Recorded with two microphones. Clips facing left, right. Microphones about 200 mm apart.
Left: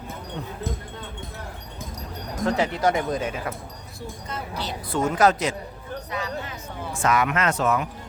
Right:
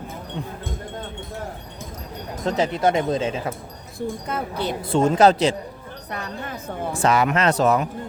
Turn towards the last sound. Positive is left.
turn(degrees=-35)  # may be behind; listen again after turning